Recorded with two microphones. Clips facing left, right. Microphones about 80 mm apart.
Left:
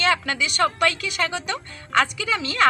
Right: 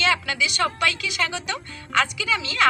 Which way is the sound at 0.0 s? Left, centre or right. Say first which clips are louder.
Left 1 dB; left.